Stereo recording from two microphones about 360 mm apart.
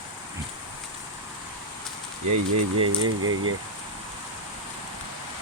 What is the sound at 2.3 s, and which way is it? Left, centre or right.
Speech, right.